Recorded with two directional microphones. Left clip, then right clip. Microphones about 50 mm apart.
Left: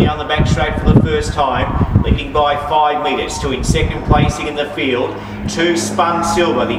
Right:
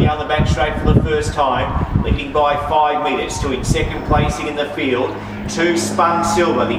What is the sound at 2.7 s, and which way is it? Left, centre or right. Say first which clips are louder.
Speech: left 1 dB; centre.